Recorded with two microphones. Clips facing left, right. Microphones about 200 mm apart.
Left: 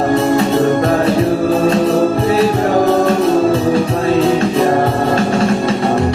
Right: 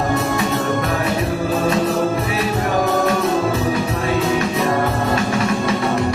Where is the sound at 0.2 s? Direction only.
30° left (ahead or behind).